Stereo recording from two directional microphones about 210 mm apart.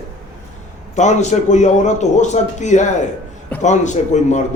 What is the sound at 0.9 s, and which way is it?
Speech, 35° left (ahead or behind).